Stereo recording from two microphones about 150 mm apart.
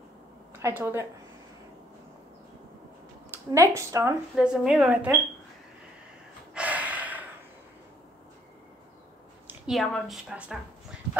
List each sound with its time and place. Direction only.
0.6 s a woman's voice: 20° right (ahead or behind)
3.3 s a woman's voice: 20° right (ahead or behind)
4.4 s a woman's voice: 5° right (ahead or behind)
6.5 s gasp: 10° right (ahead or behind)
9.5 s a woman's voice: centre (ahead or behind)